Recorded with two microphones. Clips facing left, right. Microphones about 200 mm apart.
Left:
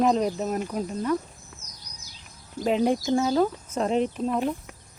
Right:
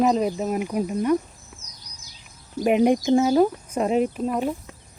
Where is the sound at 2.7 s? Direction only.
15° right (ahead or behind).